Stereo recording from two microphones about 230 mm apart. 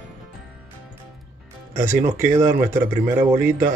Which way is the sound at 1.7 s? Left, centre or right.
Centre.